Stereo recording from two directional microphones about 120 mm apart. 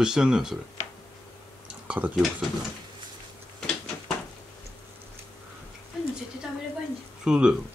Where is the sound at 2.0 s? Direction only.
15° right (ahead or behind).